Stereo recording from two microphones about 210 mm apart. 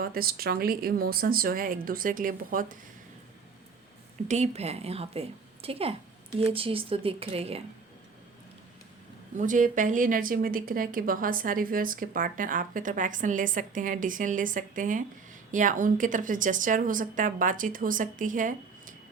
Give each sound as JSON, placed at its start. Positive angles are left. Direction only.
{"t": 0.0, "sound": "speech", "side_deg": -45}
{"t": 4.3, "sound": "a woman's voice", "side_deg": -30}
{"t": 9.4, "sound": "a woman's voice", "side_deg": -40}